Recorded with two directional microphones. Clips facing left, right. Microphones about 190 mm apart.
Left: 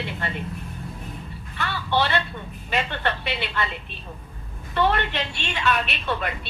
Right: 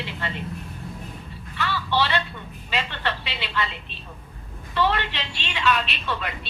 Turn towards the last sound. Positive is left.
turn(degrees=50)  # may be behind; listen again after turning